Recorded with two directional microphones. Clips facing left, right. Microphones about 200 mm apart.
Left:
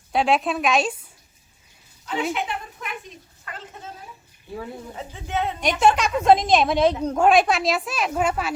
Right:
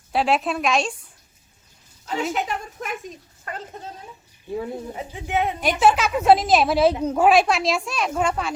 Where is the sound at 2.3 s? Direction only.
40° right (ahead or behind).